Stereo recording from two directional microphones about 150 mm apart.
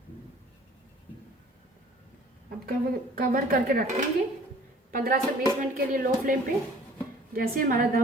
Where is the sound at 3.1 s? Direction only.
70° right (ahead or behind).